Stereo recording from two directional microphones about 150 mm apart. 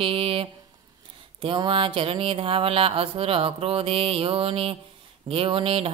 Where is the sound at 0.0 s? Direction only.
40° right (ahead or behind).